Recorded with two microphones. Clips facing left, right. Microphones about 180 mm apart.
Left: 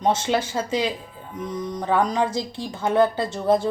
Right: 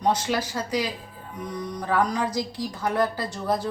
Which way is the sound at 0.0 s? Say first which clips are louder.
Left 3 dB; 25° left (ahead or behind).